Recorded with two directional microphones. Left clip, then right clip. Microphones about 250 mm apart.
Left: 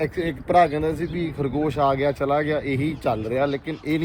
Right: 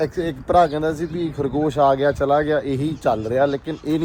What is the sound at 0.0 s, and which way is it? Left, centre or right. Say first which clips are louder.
A man's voice: right 3 dB; centre.